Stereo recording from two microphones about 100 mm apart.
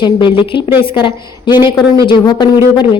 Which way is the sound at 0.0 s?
50° left (ahead or behind).